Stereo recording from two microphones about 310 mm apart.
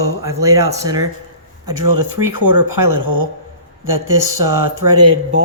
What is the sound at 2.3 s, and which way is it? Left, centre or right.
Speech, right.